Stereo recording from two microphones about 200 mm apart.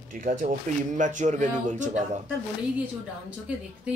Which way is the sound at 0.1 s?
40° right (ahead or behind).